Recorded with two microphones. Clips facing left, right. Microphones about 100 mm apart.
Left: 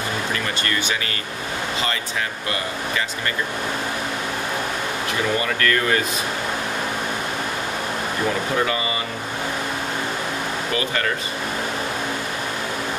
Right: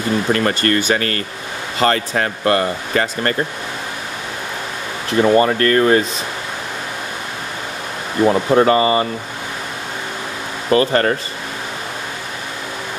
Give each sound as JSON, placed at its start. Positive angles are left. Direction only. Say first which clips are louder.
{"t": 0.3, "sound": "speech", "louder": "right 9 dB", "side_deg": -50}
{"t": 5.2, "sound": "speech", "louder": "right 10 dB", "side_deg": -40}
{"t": 8.3, "sound": "speech", "louder": "right 10 dB", "side_deg": -40}
{"t": 10.7, "sound": "speech", "louder": "right 12 dB", "side_deg": -40}